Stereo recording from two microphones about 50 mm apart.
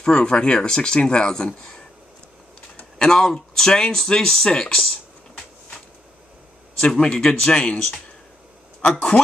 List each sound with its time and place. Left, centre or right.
0.0 s speech: centre
3.0 s speech: centre
7.0 s speech: centre